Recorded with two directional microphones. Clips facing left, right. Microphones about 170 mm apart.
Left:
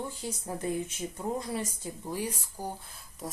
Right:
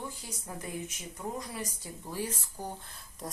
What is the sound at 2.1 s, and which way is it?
Speech, 15° left (ahead or behind).